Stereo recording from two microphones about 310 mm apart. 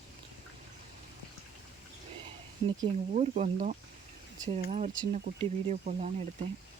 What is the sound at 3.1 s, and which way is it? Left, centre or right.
Speech, right.